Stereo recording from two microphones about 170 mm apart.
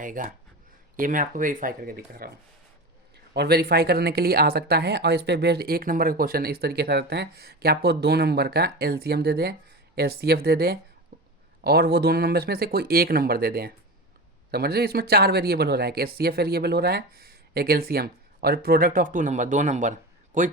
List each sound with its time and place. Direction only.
0.0 s speech: 50° right (ahead or behind)
3.3 s speech: 70° right (ahead or behind); by 20.5 s 50° right (ahead or behind)